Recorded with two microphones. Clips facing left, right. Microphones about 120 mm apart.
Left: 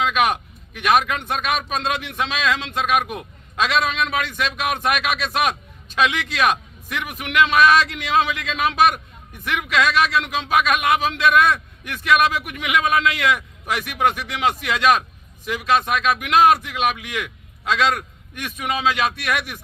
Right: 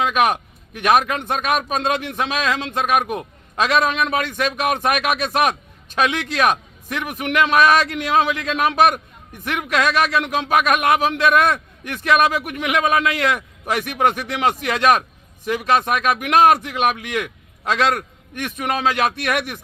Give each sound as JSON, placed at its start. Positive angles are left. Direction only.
{"t": 0.0, "sound": "a man's voice", "side_deg": -40}